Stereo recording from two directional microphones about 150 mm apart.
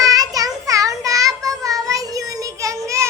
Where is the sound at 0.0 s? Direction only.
25° right (ahead or behind).